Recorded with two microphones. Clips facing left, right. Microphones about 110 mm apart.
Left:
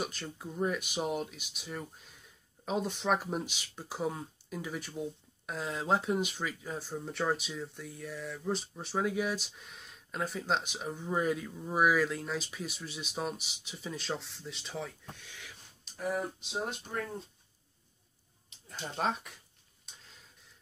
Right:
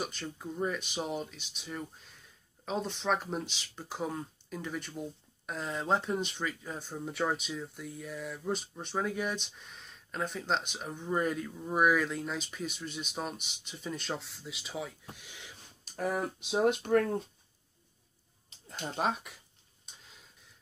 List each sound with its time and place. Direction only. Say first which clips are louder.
0.0 s speech: even; 5° left (ahead or behind)
16.4 s speech: right 10 dB; 75° right (ahead or behind)
18.9 s speech: right 1 dB; 5° right (ahead or behind)